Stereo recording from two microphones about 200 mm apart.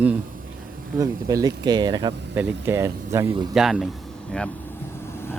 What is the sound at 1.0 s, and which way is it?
Speech, 15° right (ahead or behind).